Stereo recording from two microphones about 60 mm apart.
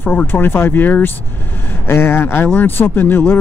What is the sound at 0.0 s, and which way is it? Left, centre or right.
Speech, left.